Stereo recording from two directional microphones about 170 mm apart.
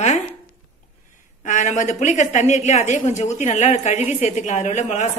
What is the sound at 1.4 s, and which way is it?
A man's voice, 45° left (ahead or behind).